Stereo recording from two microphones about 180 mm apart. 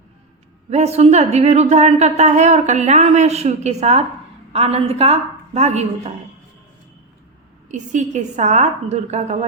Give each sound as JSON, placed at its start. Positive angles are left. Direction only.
{"t": 0.7, "sound": "speech", "side_deg": -35}
{"t": 7.7, "sound": "speech", "side_deg": -40}